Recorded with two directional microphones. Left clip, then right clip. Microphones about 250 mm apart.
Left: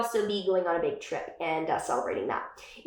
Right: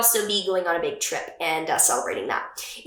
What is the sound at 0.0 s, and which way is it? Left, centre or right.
A woman's voice, centre.